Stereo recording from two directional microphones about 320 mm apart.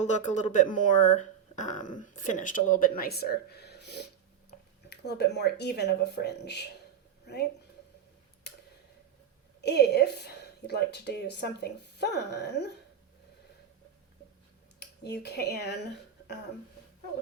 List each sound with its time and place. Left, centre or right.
0.0 s a woman's voice: left
9.6 s a woman's voice: left
14.8 s a woman's voice: left